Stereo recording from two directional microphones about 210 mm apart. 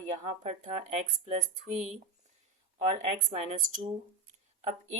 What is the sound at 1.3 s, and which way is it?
Speech, 35° right (ahead or behind).